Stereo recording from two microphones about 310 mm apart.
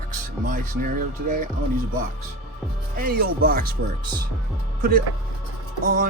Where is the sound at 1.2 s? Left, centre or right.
Right.